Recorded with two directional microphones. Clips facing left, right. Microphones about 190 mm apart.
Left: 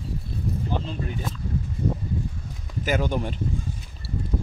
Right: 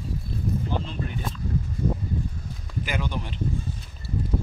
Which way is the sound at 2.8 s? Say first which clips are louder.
Left 6 dB; 45° left (ahead or behind).